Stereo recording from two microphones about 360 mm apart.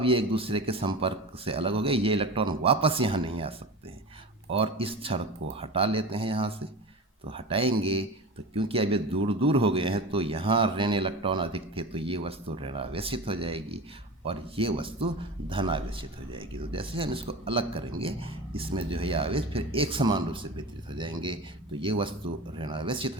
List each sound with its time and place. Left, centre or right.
0.0 s a man's voice: centre
4.5 s a man's voice: centre